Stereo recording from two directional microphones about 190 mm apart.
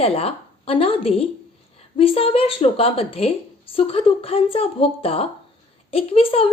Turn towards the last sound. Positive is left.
turn(degrees=30)  # may be behind; listen again after turning